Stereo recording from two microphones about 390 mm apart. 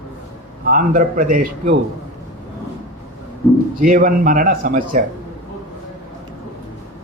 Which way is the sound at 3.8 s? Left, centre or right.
Right.